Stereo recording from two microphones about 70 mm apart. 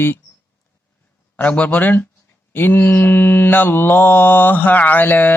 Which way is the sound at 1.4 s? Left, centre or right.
Left.